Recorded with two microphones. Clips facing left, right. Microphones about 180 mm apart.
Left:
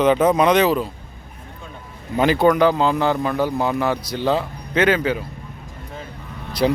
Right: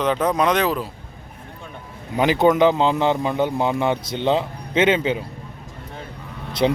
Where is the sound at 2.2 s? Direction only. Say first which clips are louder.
Even; 20° right (ahead or behind).